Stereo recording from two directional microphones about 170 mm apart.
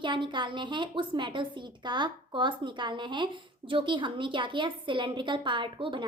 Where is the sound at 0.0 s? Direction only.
30° right (ahead or behind).